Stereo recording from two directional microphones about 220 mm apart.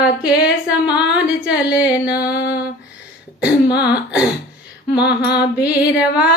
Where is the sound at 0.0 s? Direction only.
5° right (ahead or behind).